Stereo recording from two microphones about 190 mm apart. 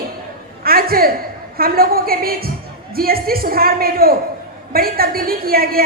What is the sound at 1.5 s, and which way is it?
A woman's voice, 50° right (ahead or behind).